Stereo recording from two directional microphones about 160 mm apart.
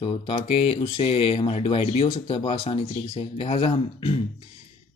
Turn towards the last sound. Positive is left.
turn(degrees=35)  # may be behind; listen again after turning